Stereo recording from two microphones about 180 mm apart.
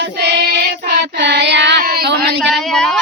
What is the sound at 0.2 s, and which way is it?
Child singing, 65° right (ahead or behind).